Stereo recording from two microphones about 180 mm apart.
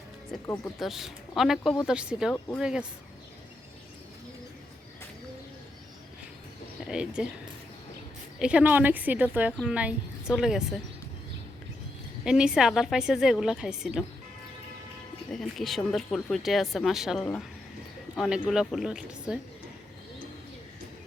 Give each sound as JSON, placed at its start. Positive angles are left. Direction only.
{"t": 0.4, "sound": "speech", "side_deg": 15}
{"t": 0.8, "sound": "speech", "side_deg": 0}
{"t": 6.8, "sound": "speech", "side_deg": -5}
{"t": 8.4, "sound": "a woman's voice", "side_deg": -5}
{"t": 12.2, "sound": "speech", "side_deg": -5}
{"t": 15.3, "sound": "speech", "side_deg": 0}